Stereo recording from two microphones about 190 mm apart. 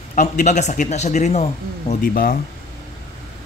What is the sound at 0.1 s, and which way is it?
A man's voice, 40° left (ahead or behind).